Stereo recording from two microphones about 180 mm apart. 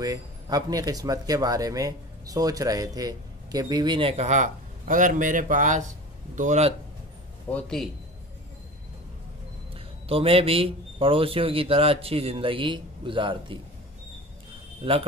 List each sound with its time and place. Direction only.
0.0 s speech: 20° right (ahead or behind); by 6.7 s 40° right (ahead or behind)
7.4 s a man's voice: 5° left (ahead or behind)
9.8 s speech: 30° right (ahead or behind)
14.8 s speech: 30° right (ahead or behind)